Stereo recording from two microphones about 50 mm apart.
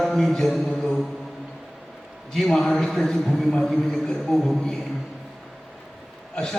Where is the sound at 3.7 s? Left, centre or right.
Centre.